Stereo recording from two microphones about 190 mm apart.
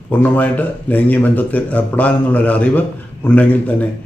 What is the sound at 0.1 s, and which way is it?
Speech, 10° left (ahead or behind).